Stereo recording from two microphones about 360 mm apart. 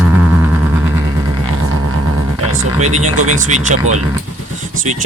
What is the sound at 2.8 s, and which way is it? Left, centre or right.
Vehicle, centre.